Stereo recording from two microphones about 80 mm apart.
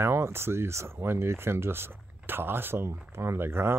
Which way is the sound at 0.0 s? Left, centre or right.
Right.